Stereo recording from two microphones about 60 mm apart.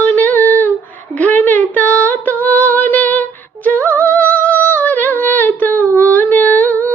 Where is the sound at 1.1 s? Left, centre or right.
Left.